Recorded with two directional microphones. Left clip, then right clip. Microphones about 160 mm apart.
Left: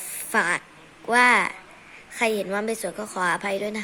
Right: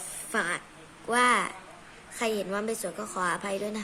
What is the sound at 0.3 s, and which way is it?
Speech, 20° left (ahead or behind).